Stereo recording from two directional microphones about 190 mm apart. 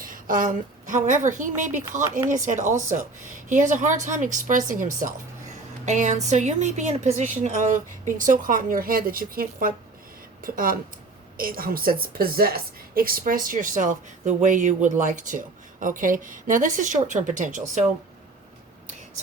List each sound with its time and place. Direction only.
0.0 s a woman's voice: 45° right (ahead or behind)